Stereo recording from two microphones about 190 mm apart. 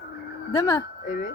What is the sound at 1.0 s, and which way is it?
Speech, 45° left (ahead or behind).